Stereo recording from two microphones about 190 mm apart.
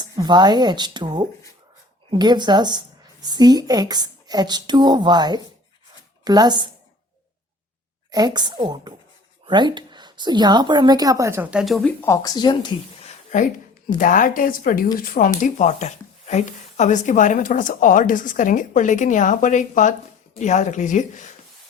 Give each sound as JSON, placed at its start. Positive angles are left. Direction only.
{"t": 0.0, "sound": "a woman's voice", "side_deg": -20}
{"t": 8.1, "sound": "a woman's voice", "side_deg": -20}
{"t": 11.6, "sound": "speech", "side_deg": 0}
{"t": 12.0, "sound": "a woman's voice", "side_deg": 15}